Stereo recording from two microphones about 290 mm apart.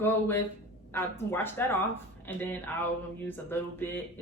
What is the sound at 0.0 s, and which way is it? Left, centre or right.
A woman's voice, centre.